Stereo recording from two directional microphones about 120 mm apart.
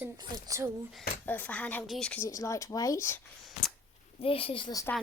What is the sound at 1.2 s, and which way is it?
Speech, 15° left (ahead or behind).